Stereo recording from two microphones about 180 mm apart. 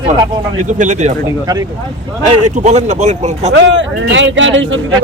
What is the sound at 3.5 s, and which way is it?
A man's voice, 90° right.